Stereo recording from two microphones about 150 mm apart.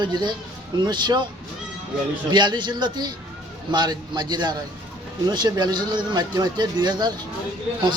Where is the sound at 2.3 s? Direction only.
30° right (ahead or behind).